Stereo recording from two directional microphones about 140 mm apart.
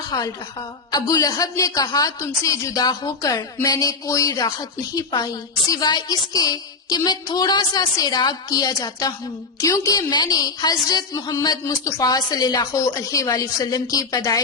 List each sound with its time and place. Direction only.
0.1 s a woman's voice: 25° left (ahead or behind)